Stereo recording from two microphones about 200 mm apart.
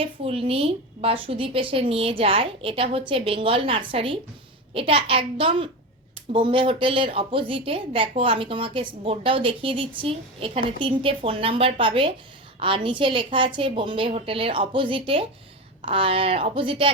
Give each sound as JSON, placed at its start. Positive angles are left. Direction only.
{"t": 0.0, "sound": "a woman's voice", "side_deg": -30}